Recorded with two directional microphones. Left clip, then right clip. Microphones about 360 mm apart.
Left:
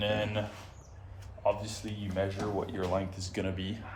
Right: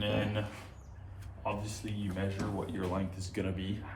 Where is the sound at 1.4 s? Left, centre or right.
Left.